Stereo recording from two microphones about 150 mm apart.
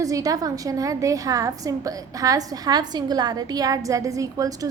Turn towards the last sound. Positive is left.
turn(degrees=-25)  # may be behind; listen again after turning